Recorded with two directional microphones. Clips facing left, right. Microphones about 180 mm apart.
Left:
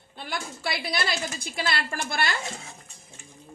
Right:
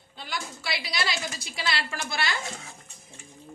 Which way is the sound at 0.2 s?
55° left (ahead or behind).